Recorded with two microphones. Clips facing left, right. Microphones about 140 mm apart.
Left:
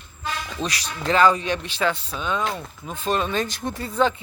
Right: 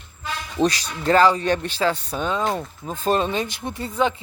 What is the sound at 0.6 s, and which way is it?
Speech, 40° right (ahead or behind).